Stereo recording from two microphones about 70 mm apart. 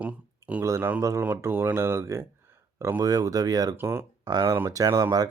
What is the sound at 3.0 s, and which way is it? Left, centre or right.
Speech, right.